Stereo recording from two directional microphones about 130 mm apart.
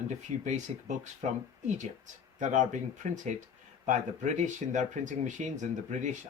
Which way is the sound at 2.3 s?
75° right (ahead or behind).